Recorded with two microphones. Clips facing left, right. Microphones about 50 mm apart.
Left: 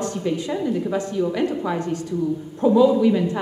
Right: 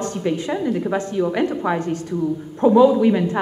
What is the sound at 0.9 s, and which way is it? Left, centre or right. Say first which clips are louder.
A woman's voice: right 2 dB; right.